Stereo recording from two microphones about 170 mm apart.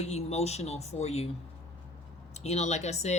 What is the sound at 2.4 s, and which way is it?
Speech, 40° left (ahead or behind).